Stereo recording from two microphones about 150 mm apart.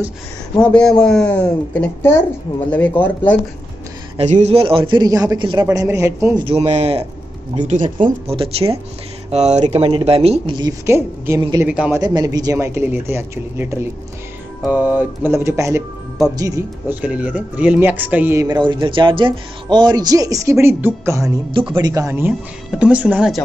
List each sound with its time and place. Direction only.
0.6 s speech: 5° left (ahead or behind)
4.2 s a man's voice: 45° right (ahead or behind); by 5.7 s 30° right (ahead or behind)
5.7 s speech: 20° right (ahead or behind)
6.4 s a man's voice: 45° right (ahead or behind)
7.6 s speech: 60° right (ahead or behind)
8.3 s a man's voice: 40° right (ahead or behind)
10.9 s speech: 15° right (ahead or behind)
12.0 s speech: 25° right (ahead or behind)
18.7 s speech: 35° right (ahead or behind); by 23.3 s 10° right (ahead or behind)